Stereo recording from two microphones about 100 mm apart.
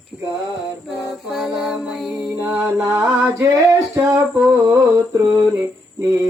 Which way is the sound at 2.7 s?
25° right (ahead or behind).